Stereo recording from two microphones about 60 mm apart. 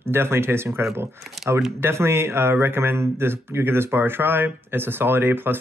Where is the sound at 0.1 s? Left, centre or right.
Right.